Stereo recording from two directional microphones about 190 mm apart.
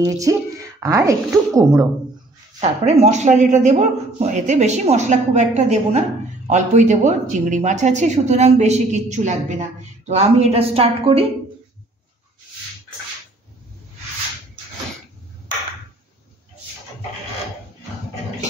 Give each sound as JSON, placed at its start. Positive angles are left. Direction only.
{"t": 0.0, "sound": "a woman's voice", "side_deg": -15}
{"t": 2.6, "sound": "a man's voice", "side_deg": -35}